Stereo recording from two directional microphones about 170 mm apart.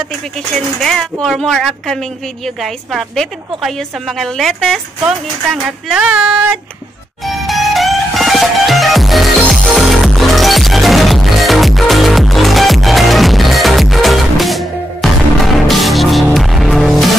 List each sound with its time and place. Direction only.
0.7 s a woman's voice: 5° left (ahead or behind)
7.2 s music: centre (ahead or behind)